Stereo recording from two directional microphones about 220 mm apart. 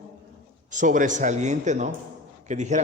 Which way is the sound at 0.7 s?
35° right (ahead or behind).